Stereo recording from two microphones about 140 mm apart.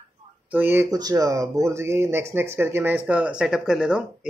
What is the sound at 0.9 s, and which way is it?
Speech, 25° right (ahead or behind).